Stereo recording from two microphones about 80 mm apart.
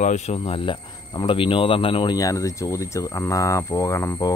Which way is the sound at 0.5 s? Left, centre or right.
Left.